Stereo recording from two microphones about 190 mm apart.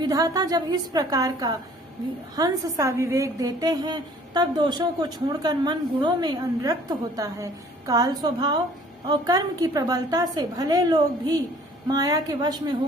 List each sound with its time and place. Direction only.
0.0 s a woman's voice: 20° right (ahead or behind)